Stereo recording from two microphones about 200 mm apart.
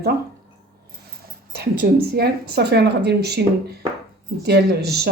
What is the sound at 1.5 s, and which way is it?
A woman's voice, 55° right (ahead or behind).